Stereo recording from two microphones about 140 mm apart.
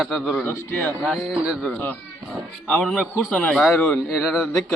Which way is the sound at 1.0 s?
Centre (ahead or behind).